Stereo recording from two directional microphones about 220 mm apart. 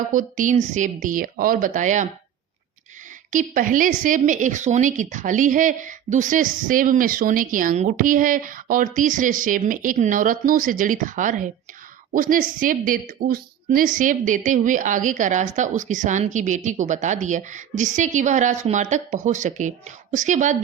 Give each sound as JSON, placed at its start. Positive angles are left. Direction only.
{"t": 0.1, "sound": "a woman's voice", "side_deg": -35}
{"t": 3.3, "sound": "a woman's voice", "side_deg": -35}